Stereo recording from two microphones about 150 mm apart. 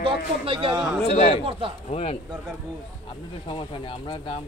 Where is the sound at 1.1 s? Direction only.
45° left (ahead or behind).